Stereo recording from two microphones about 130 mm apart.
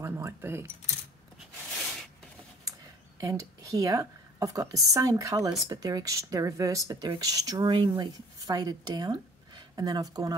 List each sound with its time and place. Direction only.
0.0 s speech: 20° right (ahead or behind)
3.2 s a woman's voice: 25° right (ahead or behind)